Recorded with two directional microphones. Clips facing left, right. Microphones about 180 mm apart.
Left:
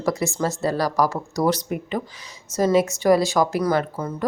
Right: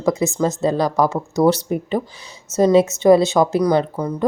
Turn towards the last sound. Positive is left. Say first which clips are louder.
# right 5 dB
turn(degrees=-20)  # may be behind; listen again after turning